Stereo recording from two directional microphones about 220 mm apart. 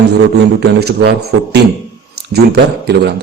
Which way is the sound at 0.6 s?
45° right (ahead or behind).